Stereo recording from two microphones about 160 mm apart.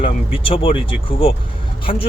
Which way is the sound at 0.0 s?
35° left (ahead or behind).